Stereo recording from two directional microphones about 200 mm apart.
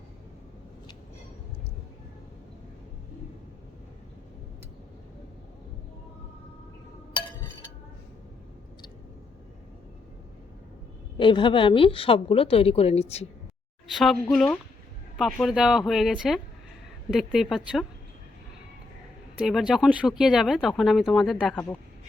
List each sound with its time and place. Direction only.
11.2 s a woman's voice: 25° left (ahead or behind)
13.9 s speech: centre (ahead or behind)
19.4 s speech: centre (ahead or behind)